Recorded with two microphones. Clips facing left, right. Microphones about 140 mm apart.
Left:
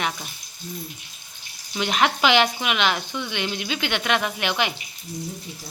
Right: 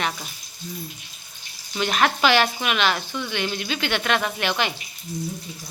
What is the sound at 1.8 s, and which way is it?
Speech, 15° left (ahead or behind).